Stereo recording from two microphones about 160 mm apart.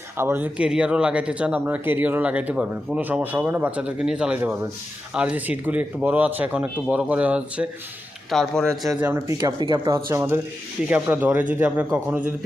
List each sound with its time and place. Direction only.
0.2 s speech: 15° right (ahead or behind)
8.3 s a man's voice: 5° left (ahead or behind)
8.9 s speech: 15° right (ahead or behind)